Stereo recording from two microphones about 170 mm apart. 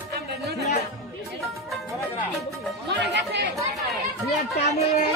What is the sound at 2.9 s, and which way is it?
Music, 90° right.